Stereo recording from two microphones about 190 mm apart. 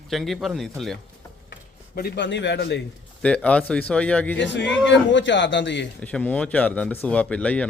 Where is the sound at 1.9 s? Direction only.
60° left (ahead or behind).